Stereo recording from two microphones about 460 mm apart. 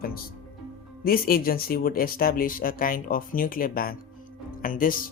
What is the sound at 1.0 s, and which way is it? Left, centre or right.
Speech, centre.